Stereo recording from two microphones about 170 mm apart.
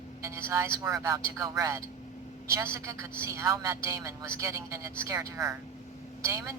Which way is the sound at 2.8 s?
20° right (ahead or behind).